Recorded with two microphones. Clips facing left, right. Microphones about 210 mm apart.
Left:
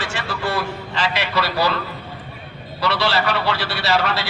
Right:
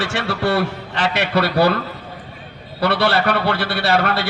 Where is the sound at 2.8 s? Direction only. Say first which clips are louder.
Right 3 dB; 55° right (ahead or behind).